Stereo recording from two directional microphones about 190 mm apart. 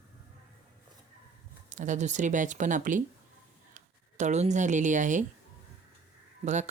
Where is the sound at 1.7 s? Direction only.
40° right (ahead or behind).